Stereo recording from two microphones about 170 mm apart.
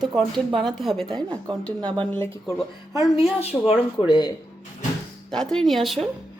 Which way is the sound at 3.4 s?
35° left (ahead or behind).